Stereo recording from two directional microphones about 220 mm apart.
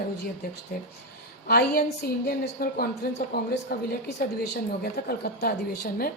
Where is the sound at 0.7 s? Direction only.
40° left (ahead or behind).